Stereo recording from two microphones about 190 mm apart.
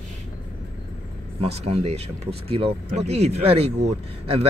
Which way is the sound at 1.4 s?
35° right (ahead or behind).